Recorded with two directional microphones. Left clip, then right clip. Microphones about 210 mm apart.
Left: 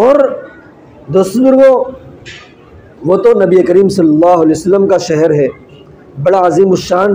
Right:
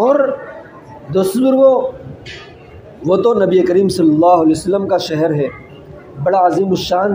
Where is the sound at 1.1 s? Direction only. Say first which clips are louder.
Left 5 dB; 5° left (ahead or behind).